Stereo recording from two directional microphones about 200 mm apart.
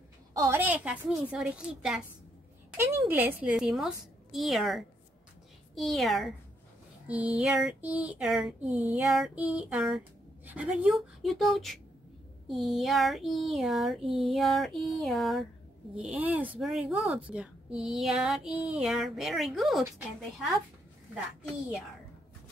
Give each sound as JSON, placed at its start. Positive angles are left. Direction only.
{"t": 0.4, "sound": "speech", "side_deg": -10}